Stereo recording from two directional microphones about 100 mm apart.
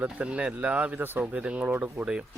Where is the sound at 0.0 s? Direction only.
15° right (ahead or behind).